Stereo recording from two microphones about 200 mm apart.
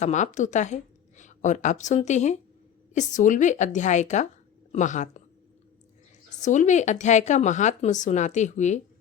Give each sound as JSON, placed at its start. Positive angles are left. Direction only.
{"t": 0.0, "sound": "a woman's voice", "side_deg": 35}
{"t": 6.4, "sound": "speech", "side_deg": 35}